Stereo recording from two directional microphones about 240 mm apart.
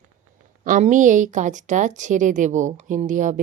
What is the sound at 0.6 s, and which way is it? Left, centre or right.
Speech, right.